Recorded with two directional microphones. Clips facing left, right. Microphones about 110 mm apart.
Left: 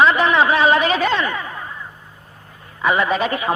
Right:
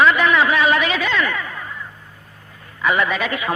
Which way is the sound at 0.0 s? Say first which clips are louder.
Left 1 dB; 30° left (ahead or behind).